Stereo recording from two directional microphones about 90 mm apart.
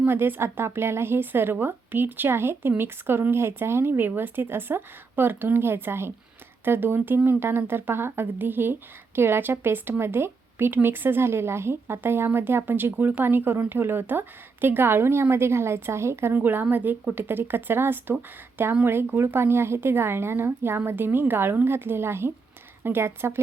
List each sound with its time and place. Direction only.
0.0 s speech: 25° right (ahead or behind)